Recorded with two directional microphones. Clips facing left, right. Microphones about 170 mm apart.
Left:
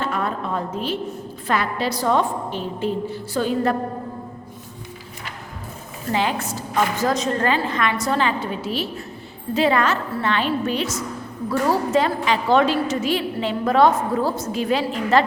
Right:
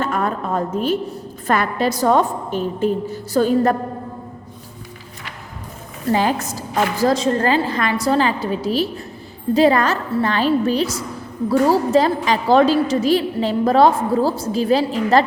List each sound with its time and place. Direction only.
0.0 s a sound: 45° right (ahead or behind)
1.5 s a woman's voice: 45° right (ahead or behind)
6.1 s a woman's voice: 40° right (ahead or behind)